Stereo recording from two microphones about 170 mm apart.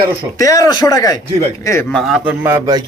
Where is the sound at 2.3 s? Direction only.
15° right (ahead or behind).